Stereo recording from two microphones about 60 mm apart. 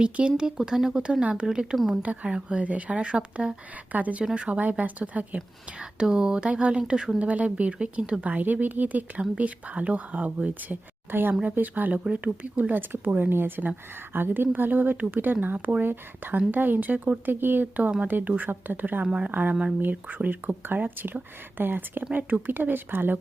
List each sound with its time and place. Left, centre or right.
0.0 s speech: centre
2.0 s speech: right
5.8 s speech: centre; by 19.0 s right
19.0 s speech: centre
19.3 s speech: right